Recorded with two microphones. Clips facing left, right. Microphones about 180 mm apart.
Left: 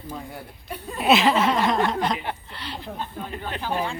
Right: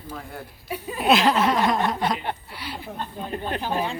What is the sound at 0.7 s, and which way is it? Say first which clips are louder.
Chuckle: even; 5° right (ahead or behind).